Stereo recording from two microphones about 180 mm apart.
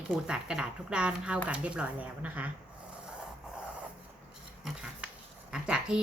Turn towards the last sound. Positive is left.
turn(degrees=-5)  # may be behind; listen again after turning